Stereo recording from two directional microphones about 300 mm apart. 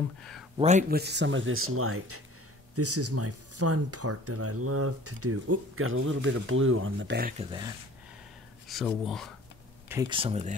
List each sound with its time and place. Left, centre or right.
0.6 s speech: right
8.6 s speech: centre
9.8 s speech: centre